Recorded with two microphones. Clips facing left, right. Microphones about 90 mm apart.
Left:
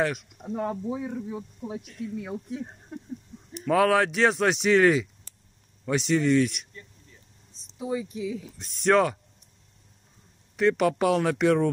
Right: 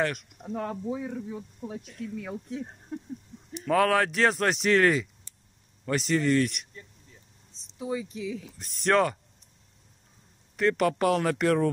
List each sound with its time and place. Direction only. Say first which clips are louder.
0.0 s speech: left 2 dB; centre (ahead or behind)
0.6 s speech: left 2 dB; 15° left (ahead or behind); by 6.7 s centre (ahead or behind)
7.8 s speech: left 2 dB; 20° left (ahead or behind)
8.5 s speech: left 3 dB; centre (ahead or behind)
10.5 s speech: left 2 dB; centre (ahead or behind)